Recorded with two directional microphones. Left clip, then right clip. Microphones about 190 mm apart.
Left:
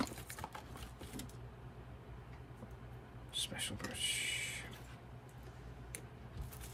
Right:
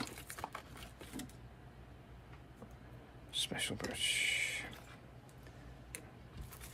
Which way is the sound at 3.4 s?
45° right (ahead or behind).